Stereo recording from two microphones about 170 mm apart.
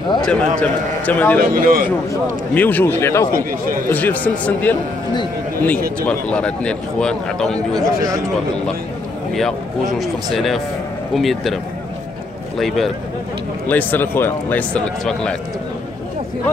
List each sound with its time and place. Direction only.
0.2 s speech: 5° left (ahead or behind)
1.4 s a man's voice: 55° right (ahead or behind)
2.5 s speech: 10° left (ahead or behind)
6.0 s a man's voice: 5° left (ahead or behind)
9.3 s a man's voice: centre (ahead or behind)
13.7 s speech: 10° left (ahead or behind)